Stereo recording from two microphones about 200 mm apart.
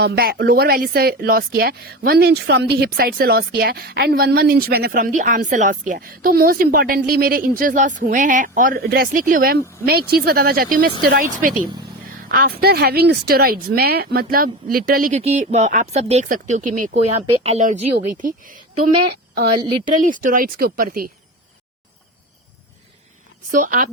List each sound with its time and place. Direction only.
0.0 s speech: 50° right (ahead or behind)
15.2 s speech: 35° right (ahead or behind)
19.1 s a sound: 50° right (ahead or behind)
19.9 s speech: 40° right (ahead or behind)
23.5 s speech: 40° right (ahead or behind)